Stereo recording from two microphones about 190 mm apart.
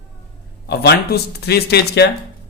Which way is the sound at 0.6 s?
60° left (ahead or behind).